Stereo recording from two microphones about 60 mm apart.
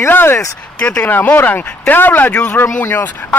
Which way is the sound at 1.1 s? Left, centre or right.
Left.